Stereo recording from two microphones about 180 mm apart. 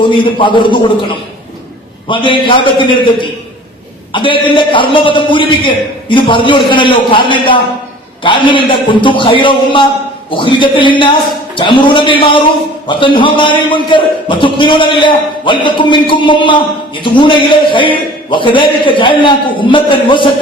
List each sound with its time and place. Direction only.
0.0 s a man's voice: 25° left (ahead or behind)
2.0 s a man's voice: 30° left (ahead or behind)